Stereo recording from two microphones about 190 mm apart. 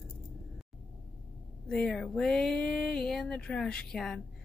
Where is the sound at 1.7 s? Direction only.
5° left (ahead or behind).